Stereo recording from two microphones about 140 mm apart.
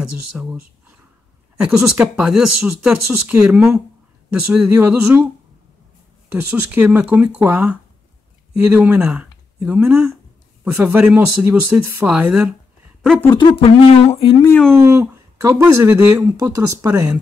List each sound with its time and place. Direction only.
0.3 s speech: 10° right (ahead or behind)
1.6 s speech: 5° right (ahead or behind)
13.6 s speech: 40° left (ahead or behind)
14.7 s speech: 20° right (ahead or behind)